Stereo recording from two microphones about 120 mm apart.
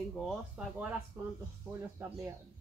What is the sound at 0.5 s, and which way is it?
Speech, 10° right (ahead or behind).